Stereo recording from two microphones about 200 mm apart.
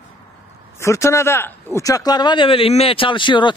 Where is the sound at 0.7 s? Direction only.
15° left (ahead or behind).